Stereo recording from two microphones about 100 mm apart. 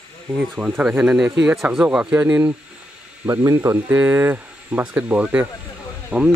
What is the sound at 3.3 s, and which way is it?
Speech, 30° right (ahead or behind).